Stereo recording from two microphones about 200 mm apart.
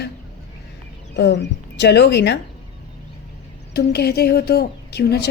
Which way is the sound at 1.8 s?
55° left (ahead or behind).